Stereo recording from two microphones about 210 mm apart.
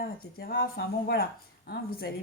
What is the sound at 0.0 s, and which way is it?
Speech, 45° left (ahead or behind).